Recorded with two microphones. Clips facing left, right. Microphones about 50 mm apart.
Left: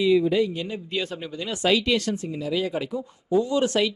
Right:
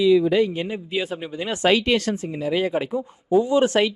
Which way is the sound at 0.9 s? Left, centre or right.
Centre.